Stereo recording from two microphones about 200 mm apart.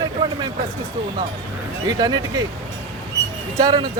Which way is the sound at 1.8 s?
20° right (ahead or behind).